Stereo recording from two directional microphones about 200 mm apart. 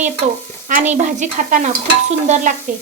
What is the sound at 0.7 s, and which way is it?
Dishes, 40° right (ahead or behind).